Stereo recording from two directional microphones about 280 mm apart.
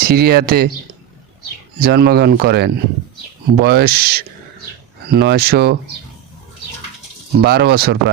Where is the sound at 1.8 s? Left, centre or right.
Right.